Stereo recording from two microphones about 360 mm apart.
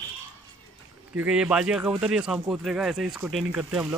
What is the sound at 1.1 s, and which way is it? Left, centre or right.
Speech, centre.